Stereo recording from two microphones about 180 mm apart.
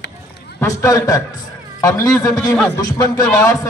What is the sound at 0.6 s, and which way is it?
A man's voice, 15° left (ahead or behind).